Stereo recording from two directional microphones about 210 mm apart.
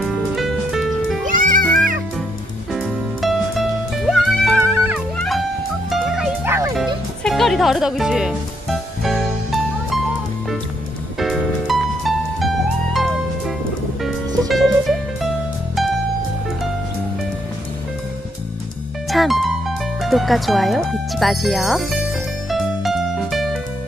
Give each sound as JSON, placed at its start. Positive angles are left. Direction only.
{"t": 0.4, "sound": "music", "side_deg": 0}
{"t": 1.2, "sound": "music", "side_deg": -40}
{"t": 2.7, "sound": "music", "side_deg": 0}
{"t": 7.2, "sound": "music", "side_deg": 0}
{"t": 11.1, "sound": "music", "side_deg": 0}
{"t": 14.5, "sound": "music", "side_deg": 0}
{"t": 19.0, "sound": "music", "side_deg": 0}
{"t": 20.0, "sound": "speech", "side_deg": 0}
{"t": 22.5, "sound": "music", "side_deg": 0}